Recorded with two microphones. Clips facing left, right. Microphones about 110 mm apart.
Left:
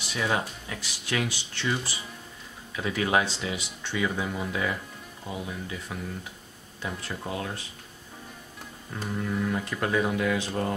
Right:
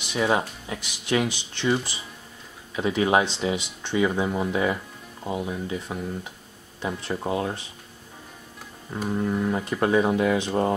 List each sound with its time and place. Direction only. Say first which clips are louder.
0.1 s speech: right 5 dB; 25° right (ahead or behind)
7.1 s speech: right 8 dB; 25° right (ahead or behind)
8.9 s speech: right 5 dB; 25° right (ahead or behind)